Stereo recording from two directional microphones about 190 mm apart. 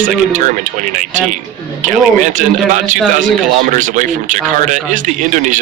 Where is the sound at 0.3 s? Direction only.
40° right (ahead or behind).